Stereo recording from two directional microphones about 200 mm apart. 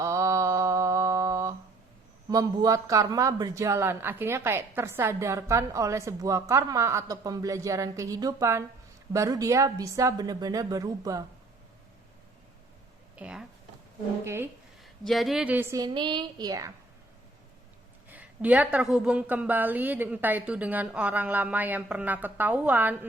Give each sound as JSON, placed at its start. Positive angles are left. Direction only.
{"t": 0.0, "sound": "mantra", "side_deg": -15}
{"t": 2.3, "sound": "a man's voice", "side_deg": -15}
{"t": 13.1, "sound": "a man's voice", "side_deg": -5}
{"t": 15.0, "sound": "speech", "side_deg": 0}
{"t": 15.8, "sound": "speech", "side_deg": -20}
{"t": 18.1, "sound": "a man's voice", "side_deg": -5}